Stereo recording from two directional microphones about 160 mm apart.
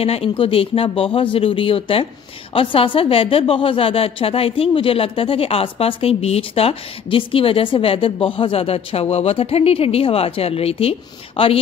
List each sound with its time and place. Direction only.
0.0 s a woman's voice: 40° left (ahead or behind)